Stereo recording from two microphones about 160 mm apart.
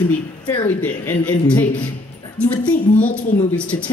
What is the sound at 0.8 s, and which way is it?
Speech, 10° left (ahead or behind).